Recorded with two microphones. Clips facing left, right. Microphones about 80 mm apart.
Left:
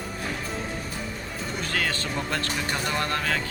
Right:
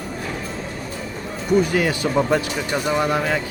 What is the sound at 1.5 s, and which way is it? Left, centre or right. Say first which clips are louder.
Speech: right 12 dB; centre.